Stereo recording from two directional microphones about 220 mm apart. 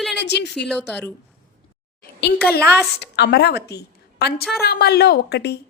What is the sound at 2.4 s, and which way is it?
A woman's voice, 45° left (ahead or behind).